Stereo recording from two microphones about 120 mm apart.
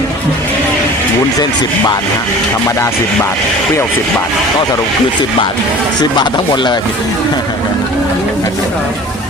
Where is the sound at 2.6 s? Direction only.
25° left (ahead or behind).